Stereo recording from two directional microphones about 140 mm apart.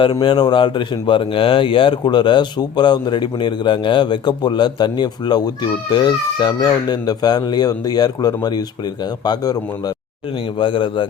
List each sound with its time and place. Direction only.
0.0 s speech: 35° left (ahead or behind)